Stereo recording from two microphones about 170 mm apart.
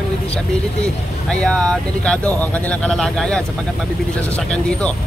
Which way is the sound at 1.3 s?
5° left (ahead or behind).